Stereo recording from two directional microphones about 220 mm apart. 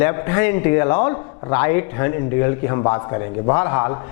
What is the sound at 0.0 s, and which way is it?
A man's voice, 15° left (ahead or behind).